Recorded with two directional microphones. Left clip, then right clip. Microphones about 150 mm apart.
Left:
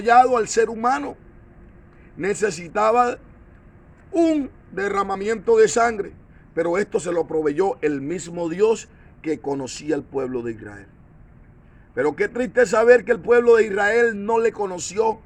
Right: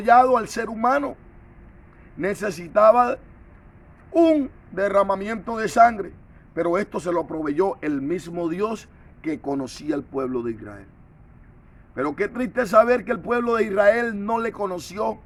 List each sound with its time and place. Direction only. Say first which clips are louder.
0.0 s speech: left 1 dB; 25° right (ahead or behind)
2.1 s speech: left 3 dB; 25° right (ahead or behind)
11.9 s a man's voice: left 4 dB; 30° right (ahead or behind)